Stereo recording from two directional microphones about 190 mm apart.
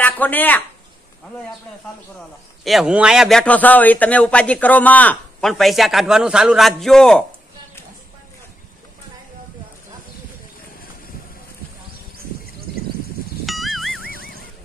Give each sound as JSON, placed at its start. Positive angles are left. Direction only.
{"t": 0.0, "sound": "a woman's voice", "side_deg": 10}
{"t": 2.6, "sound": "a man's voice", "side_deg": 0}
{"t": 13.5, "sound": "music", "side_deg": 0}
{"t": 14.0, "sound": "music", "side_deg": 50}